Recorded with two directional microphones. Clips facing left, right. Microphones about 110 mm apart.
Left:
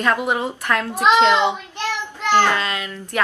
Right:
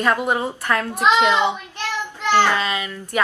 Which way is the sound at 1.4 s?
15° left (ahead or behind).